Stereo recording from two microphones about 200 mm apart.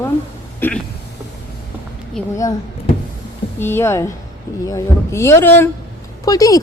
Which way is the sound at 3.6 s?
10° left (ahead or behind).